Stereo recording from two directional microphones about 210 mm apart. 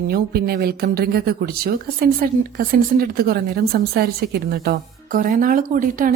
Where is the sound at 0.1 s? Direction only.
50° right (ahead or behind).